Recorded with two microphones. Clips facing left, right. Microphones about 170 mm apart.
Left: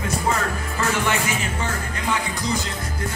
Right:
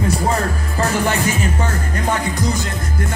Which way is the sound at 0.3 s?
35° right (ahead or behind).